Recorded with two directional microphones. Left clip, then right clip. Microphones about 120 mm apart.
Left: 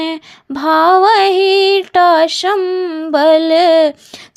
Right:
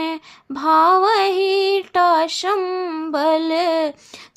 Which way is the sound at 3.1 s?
30° left (ahead or behind).